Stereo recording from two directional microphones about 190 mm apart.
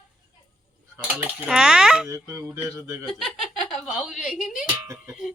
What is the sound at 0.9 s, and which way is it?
Speech, 10° right (ahead or behind).